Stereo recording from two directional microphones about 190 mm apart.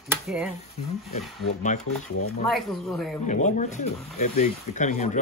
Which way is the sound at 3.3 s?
40° left (ahead or behind).